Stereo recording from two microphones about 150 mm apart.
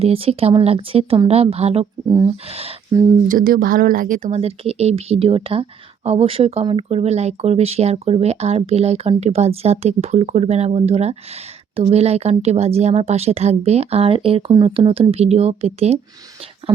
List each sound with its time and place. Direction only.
0.0 s speech: 40° right (ahead or behind)
2.0 s speech: 25° right (ahead or behind)
2.5 s speech: 40° right (ahead or behind)
3.2 s speech: 70° right (ahead or behind); by 16.0 s 45° right (ahead or behind)